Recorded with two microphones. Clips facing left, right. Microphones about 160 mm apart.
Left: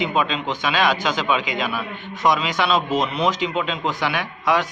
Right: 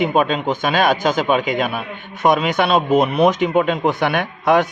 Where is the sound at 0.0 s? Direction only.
50° right (ahead or behind).